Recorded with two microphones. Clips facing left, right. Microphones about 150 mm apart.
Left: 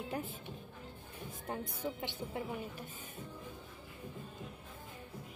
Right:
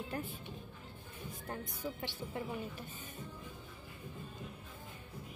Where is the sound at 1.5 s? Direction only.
25° left (ahead or behind).